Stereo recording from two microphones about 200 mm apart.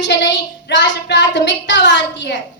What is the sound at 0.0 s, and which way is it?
Speech, 60° left (ahead or behind).